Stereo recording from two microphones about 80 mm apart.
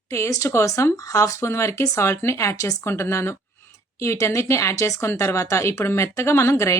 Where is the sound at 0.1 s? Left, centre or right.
Left.